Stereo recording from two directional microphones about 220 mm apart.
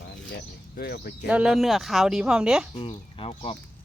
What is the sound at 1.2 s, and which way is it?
Speech, 5° right (ahead or behind).